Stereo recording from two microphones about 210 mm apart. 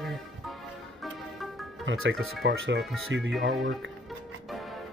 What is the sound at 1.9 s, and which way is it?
Speech, 60° right (ahead or behind).